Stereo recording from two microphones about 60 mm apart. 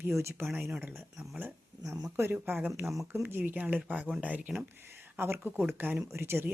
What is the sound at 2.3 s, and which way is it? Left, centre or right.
A woman's voice, right.